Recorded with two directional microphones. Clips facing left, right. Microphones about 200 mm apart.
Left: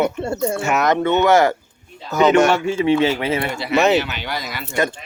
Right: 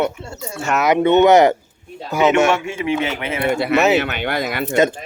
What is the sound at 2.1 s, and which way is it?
Speech, 5° right (ahead or behind).